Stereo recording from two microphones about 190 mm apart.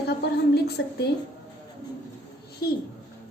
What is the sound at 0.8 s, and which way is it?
Speech, 75° left (ahead or behind).